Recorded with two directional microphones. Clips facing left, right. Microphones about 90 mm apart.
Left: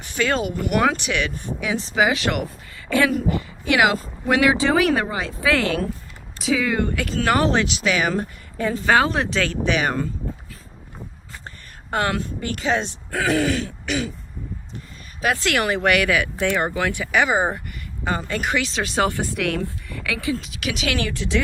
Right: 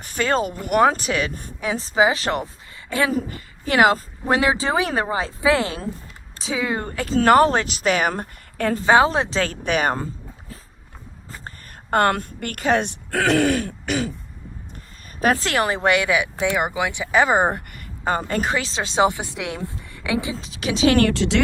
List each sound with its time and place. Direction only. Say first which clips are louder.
0.0 s speech: right 1 dB; 40° right (ahead or behind)
8.9 s speech: right 3 dB; 25° right (ahead or behind)
11.4 s speech: right 4 dB; 50° right (ahead or behind); by 17.2 s 20° right (ahead or behind)
17.3 s speech: right 2 dB; 55° right (ahead or behind); by 20.9 s 30° right (ahead or behind)
21.1 s speech: right 4 dB; 80° right